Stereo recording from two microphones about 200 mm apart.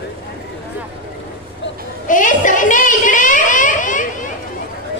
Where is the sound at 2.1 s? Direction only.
40° left (ahead or behind).